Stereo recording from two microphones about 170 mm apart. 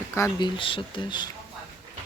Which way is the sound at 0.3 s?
25° left (ahead or behind).